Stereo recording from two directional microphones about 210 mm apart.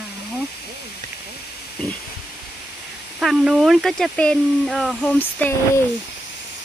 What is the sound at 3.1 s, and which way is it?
Speech, centre (ahead or behind).